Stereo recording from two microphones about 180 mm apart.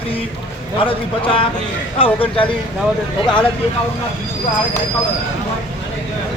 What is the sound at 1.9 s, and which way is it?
Speech, 30° left (ahead or behind).